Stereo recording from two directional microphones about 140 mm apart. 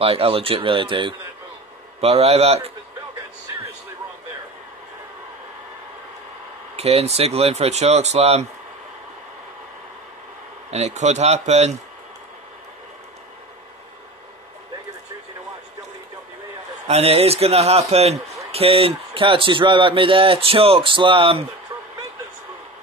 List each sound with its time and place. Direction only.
0.0 s a man's voice: 45° right (ahead or behind)
2.0 s speech: 45° right (ahead or behind)
6.8 s speech: 45° right (ahead or behind)
10.7 s speech: 50° right (ahead or behind)
16.8 s a man's voice: 45° right (ahead or behind)